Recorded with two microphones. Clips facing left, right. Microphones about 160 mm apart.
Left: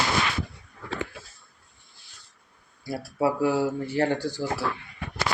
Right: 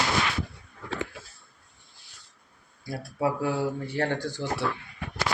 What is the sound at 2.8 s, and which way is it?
Speech, 5° left (ahead or behind).